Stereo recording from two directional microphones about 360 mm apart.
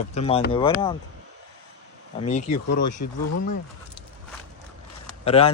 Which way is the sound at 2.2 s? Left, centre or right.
Centre.